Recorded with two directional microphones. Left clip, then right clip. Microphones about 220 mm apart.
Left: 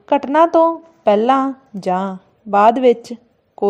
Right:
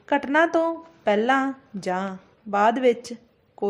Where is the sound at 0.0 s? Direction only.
15° left (ahead or behind).